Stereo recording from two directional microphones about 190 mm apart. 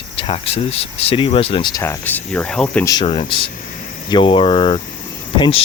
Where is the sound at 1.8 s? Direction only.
10° left (ahead or behind).